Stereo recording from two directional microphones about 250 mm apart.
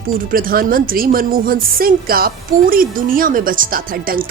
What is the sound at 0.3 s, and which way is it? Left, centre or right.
A woman's voice, right.